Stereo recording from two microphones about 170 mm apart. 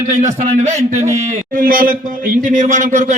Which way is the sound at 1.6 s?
55° right (ahead or behind).